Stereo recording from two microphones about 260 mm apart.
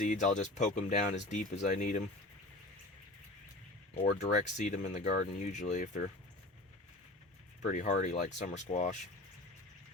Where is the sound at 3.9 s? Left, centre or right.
Left.